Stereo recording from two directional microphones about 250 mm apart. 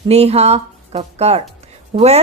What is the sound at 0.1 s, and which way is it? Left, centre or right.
Speech, right.